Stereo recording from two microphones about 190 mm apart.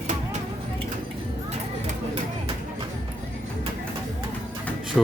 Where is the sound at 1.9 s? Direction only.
30° right (ahead or behind).